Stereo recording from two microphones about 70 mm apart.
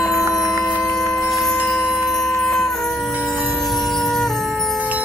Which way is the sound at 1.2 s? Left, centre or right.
Centre.